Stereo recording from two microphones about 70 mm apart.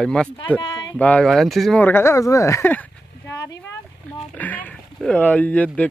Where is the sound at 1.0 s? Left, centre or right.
Left.